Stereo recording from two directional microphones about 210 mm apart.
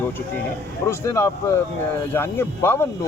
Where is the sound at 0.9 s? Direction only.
15° left (ahead or behind).